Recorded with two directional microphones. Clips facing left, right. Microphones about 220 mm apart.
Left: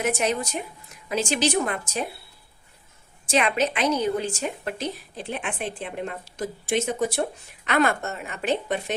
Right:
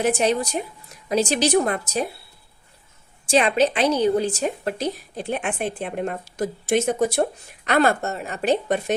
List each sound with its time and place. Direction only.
0.0 s a woman's voice: 30° right (ahead or behind)
3.2 s a woman's voice: 35° right (ahead or behind)